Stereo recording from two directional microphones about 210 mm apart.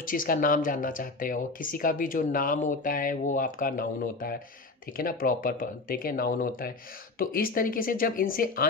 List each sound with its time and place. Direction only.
0.0 s speech: 40° left (ahead or behind)